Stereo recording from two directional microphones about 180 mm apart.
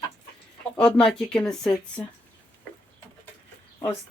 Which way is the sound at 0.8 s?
5° left (ahead or behind).